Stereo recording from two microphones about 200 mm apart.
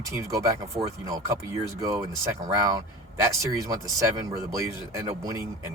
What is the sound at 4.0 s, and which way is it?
Speech, 15° right (ahead or behind).